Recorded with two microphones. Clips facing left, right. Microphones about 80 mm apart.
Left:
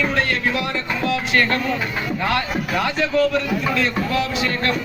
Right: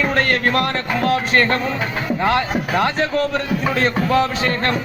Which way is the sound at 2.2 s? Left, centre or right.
Right.